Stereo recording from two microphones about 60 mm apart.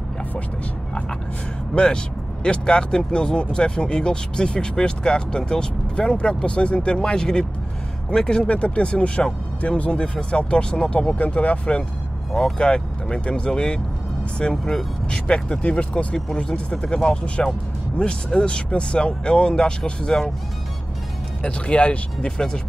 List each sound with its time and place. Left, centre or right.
2.4 s speech: centre
12.3 s speech: centre
12.5 s speech: centre
21.4 s speech: centre